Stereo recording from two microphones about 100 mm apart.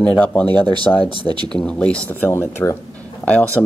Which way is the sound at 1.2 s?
50° right (ahead or behind).